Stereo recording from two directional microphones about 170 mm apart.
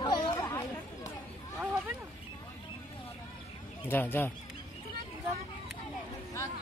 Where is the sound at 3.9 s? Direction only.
10° left (ahead or behind).